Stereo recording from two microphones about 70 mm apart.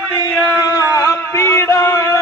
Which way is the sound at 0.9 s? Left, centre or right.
Left.